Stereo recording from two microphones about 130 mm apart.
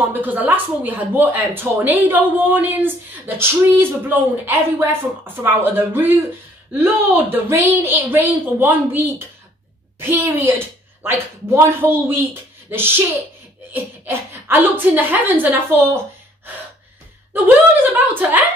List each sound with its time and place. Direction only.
0.0 s speech: 15° right (ahead or behind)
14.0 s speech: 15° right (ahead or behind)
17.9 s speech: 15° right (ahead or behind)